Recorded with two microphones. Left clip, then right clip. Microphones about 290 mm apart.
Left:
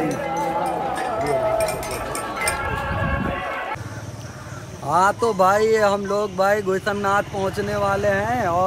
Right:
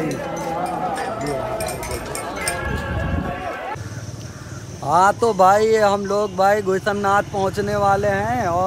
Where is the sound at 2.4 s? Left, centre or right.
Centre.